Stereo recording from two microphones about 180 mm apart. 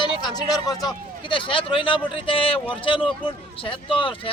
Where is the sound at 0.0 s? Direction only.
25° left (ahead or behind).